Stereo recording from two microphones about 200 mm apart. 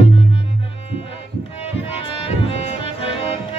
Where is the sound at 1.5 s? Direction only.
30° left (ahead or behind).